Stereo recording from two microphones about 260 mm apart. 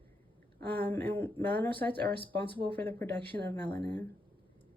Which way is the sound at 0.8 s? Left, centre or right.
Centre.